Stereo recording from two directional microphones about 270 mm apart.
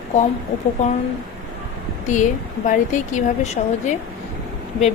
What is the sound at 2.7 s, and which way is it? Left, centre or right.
A woman's voice, left.